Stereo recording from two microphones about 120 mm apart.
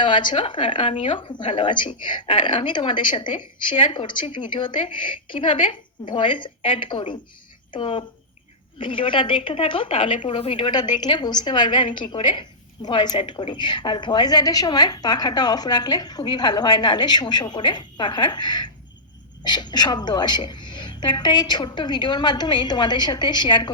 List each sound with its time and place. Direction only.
0.0 s a woman's voice: 40° left (ahead or behind)